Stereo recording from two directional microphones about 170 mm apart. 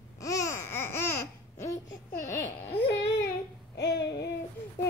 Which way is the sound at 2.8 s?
90° left.